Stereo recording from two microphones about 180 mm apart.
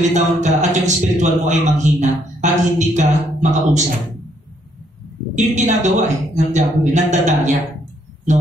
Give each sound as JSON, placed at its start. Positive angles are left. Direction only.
{"t": 0.1, "sound": "a man's voice", "side_deg": -40}
{"t": 5.3, "sound": "a man's voice", "side_deg": -40}